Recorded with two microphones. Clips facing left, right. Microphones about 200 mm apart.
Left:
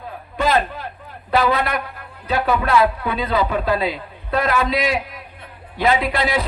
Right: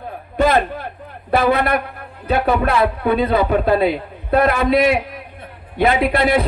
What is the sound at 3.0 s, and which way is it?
A man's voice, 55° right (ahead or behind).